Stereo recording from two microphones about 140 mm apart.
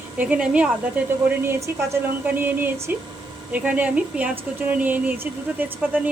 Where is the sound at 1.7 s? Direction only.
15° right (ahead or behind).